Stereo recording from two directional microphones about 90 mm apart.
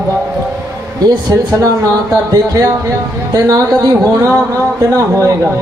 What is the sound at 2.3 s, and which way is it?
A man's voice, 40° right (ahead or behind).